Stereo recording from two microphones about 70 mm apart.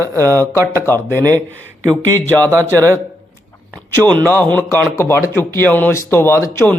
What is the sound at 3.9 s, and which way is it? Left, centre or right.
Speech, left.